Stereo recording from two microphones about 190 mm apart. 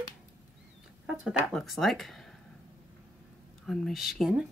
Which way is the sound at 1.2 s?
Centre (ahead or behind).